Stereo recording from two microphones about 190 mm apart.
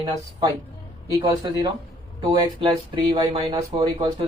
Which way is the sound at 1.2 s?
20° right (ahead or behind).